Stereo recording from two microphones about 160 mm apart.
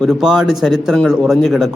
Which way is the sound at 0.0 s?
Centre (ahead or behind).